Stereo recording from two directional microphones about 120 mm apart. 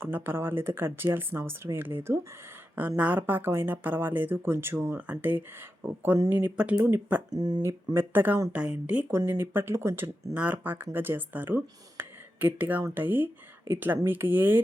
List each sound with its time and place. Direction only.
0.0 s speech: 20° right (ahead or behind)
7.3 s speech: 35° right (ahead or behind)
7.6 s speech: 20° right (ahead or behind)